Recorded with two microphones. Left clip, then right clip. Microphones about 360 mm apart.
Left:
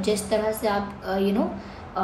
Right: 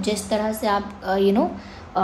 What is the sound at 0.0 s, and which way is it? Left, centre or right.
A woman's voice, right.